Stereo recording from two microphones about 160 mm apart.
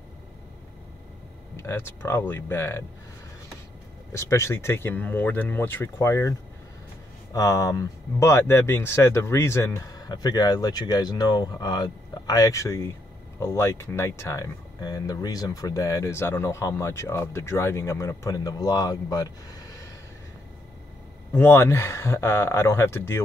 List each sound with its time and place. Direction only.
1.6 s speech: 15° left (ahead or behind)
4.1 s speech: 20° left (ahead or behind)
7.3 s speech: 20° left (ahead or behind)
21.3 s speech: 15° left (ahead or behind)